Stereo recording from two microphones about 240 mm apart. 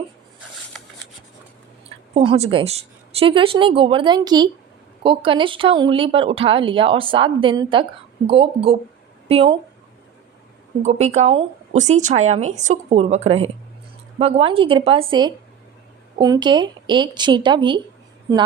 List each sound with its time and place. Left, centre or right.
2.1 s speech: right
10.8 s speech: right